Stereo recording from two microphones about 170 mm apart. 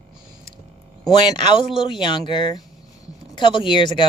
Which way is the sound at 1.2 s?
30° left (ahead or behind).